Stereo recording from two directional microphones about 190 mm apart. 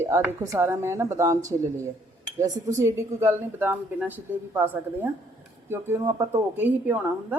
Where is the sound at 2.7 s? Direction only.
15° right (ahead or behind).